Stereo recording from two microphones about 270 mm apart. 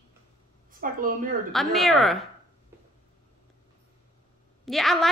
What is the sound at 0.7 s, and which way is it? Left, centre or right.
Speech, right.